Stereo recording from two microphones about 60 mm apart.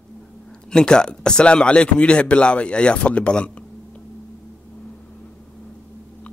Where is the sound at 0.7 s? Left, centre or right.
Centre.